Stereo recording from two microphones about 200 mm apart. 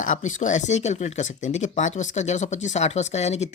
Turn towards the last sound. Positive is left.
turn(degrees=35)  # may be behind; listen again after turning